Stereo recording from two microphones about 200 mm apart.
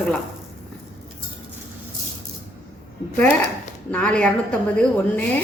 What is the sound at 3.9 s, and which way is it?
Speech, 5° left (ahead or behind).